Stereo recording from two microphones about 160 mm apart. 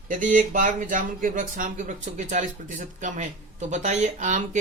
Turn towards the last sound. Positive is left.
turn(degrees=-50)  # may be behind; listen again after turning